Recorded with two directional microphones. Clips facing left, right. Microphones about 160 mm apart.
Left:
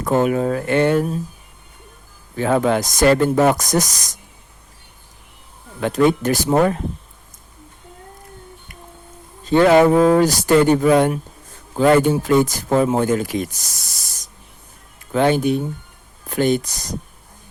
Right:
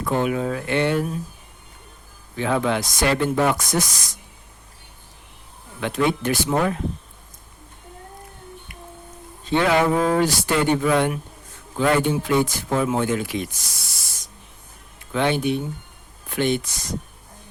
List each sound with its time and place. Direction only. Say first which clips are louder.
0.0 s speech: left 5 dB; 40° left (ahead or behind)
2.3 s speech: left 5 dB; 45° left (ahead or behind)
5.8 s speech: left 6 dB; 45° left (ahead or behind)
9.4 s speech: left 7 dB; 40° left (ahead or behind)